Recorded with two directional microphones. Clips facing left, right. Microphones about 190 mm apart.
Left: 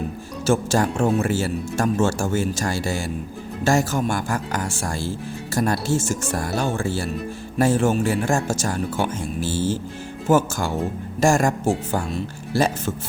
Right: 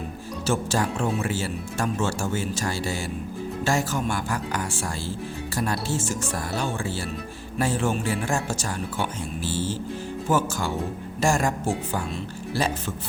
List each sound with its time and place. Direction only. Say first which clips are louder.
0.4 s speech: left 5 dB; 45° left (ahead or behind)